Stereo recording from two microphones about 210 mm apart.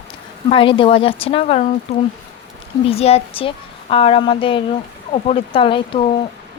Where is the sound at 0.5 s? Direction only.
25° left (ahead or behind).